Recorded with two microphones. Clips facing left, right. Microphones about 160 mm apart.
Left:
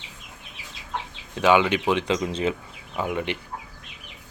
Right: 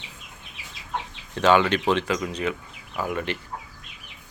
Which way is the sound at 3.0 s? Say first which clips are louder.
Left 1 dB; 15° left (ahead or behind).